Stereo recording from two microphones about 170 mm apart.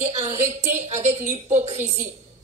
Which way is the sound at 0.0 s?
40° right (ahead or behind).